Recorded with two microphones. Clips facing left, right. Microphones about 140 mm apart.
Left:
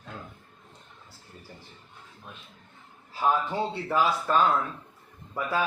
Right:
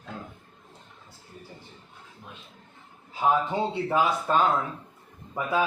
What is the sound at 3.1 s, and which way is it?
Speech, 20° right (ahead or behind).